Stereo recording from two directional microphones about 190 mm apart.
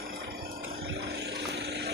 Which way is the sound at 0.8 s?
65° right (ahead or behind).